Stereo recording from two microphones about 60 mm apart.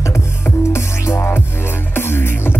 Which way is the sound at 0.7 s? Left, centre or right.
Left.